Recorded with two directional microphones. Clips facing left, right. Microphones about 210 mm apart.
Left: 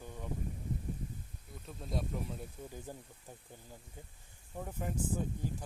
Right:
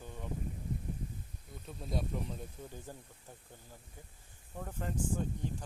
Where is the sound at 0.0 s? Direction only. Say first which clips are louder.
Even; 10° left (ahead or behind).